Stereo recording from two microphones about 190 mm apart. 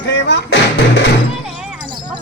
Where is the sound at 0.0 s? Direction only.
70° left (ahead or behind).